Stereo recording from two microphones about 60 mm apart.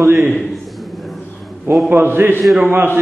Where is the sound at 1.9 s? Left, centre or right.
Right.